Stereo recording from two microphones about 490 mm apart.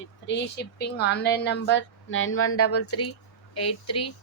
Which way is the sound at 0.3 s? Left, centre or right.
Left.